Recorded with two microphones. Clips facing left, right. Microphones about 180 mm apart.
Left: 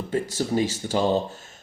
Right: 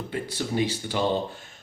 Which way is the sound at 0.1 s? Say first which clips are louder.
Left 6 dB; 40° left (ahead or behind).